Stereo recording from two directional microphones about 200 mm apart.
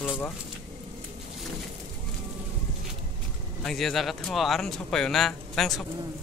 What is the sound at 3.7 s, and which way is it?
Speech, centre (ahead or behind).